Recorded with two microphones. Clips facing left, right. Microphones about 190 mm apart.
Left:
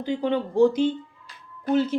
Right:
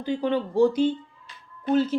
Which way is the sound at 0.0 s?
15° left (ahead or behind).